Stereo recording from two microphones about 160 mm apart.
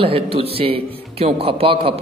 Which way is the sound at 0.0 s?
35° right (ahead or behind).